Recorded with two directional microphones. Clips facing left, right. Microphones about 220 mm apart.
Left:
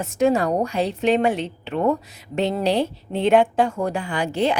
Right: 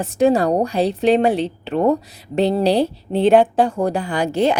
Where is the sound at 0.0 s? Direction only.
35° right (ahead or behind).